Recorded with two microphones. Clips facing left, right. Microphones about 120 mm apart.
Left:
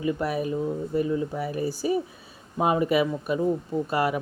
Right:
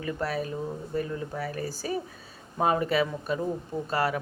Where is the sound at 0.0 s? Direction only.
15° left (ahead or behind).